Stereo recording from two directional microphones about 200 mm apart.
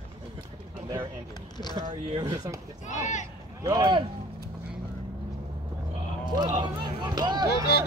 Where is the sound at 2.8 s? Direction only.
35° left (ahead or behind).